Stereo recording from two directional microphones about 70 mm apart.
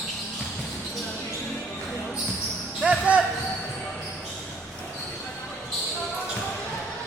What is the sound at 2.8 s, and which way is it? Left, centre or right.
Basketball bounce, centre.